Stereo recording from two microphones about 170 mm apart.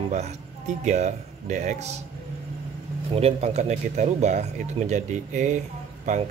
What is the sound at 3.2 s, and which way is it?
Speech, 35° right (ahead or behind).